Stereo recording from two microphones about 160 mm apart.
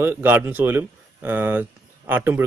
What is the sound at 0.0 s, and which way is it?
Speech, 10° right (ahead or behind).